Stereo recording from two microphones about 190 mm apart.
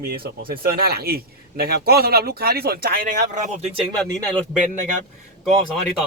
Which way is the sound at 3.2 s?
40° right (ahead or behind).